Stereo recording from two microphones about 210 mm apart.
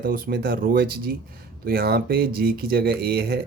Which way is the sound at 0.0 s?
45° right (ahead or behind).